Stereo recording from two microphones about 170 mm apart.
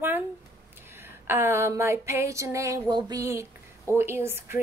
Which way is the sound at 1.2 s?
15° right (ahead or behind).